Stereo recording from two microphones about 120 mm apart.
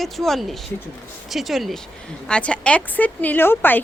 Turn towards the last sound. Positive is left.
turn(degrees=15)  # may be behind; listen again after turning